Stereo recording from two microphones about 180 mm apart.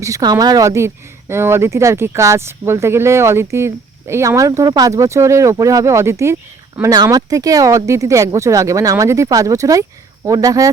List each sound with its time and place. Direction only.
0.0 s speech: 20° right (ahead or behind)